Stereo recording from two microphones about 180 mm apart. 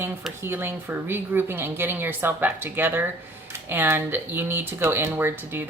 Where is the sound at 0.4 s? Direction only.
15° right (ahead or behind).